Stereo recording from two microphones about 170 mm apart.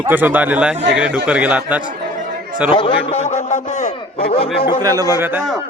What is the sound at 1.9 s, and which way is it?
Chatter, 50° right (ahead or behind).